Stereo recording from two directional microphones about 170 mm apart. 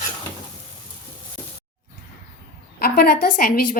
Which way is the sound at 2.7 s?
60° left (ahead or behind).